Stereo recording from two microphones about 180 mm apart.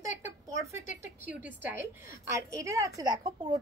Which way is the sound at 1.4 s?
50° left (ahead or behind).